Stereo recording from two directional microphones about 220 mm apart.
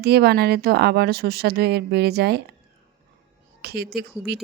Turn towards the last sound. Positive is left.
turn(degrees=-45)  # may be behind; listen again after turning